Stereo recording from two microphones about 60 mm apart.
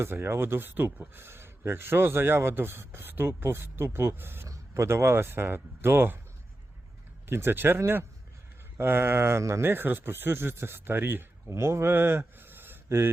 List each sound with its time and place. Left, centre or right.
0.0 s speech: right
4.4 s speech: right
7.3 s speech: right
11.4 s speech: right